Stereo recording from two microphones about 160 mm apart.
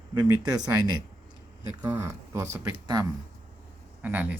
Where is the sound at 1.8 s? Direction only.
20° right (ahead or behind).